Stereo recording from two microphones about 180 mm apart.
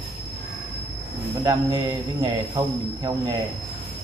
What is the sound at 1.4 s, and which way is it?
Speech, 20° right (ahead or behind).